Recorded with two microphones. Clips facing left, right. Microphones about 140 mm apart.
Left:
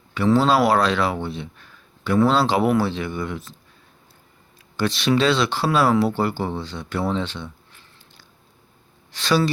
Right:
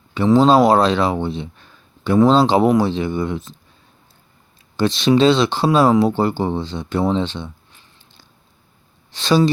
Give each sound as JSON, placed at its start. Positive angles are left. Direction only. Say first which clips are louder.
{"t": 0.1, "sound": "speech", "louder": "right 5 dB", "side_deg": -25}
{"t": 4.8, "sound": "speech", "louder": "right 5 dB", "side_deg": -25}